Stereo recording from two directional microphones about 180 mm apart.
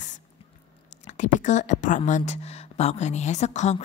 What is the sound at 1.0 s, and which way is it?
Speech, 45° left (ahead or behind).